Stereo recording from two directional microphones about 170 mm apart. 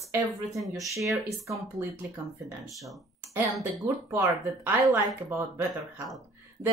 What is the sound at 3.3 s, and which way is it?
Speech, 15° right (ahead or behind).